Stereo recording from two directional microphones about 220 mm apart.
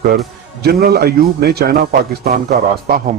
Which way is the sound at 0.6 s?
45° right (ahead or behind).